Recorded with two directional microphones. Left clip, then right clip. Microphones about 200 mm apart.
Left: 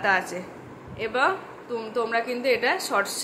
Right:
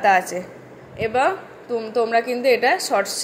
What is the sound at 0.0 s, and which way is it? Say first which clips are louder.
A woman's voice: right 6 dB; 15° right (ahead or behind).